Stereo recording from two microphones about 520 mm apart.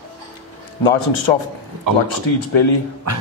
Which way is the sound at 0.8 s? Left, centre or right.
Left.